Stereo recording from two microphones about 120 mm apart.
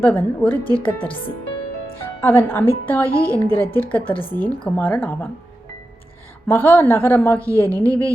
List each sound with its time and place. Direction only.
0.0 s a woman's voice: 15° left (ahead or behind)
2.2 s a woman's voice: 20° left (ahead or behind)
6.5 s a woman's voice: 15° left (ahead or behind)